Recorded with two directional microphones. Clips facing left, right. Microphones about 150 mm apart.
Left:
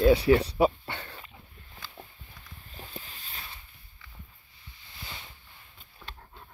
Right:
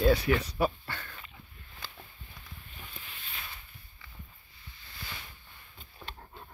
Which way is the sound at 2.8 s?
35° left (ahead or behind).